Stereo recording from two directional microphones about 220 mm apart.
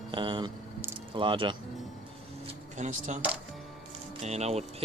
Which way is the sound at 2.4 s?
30° right (ahead or behind).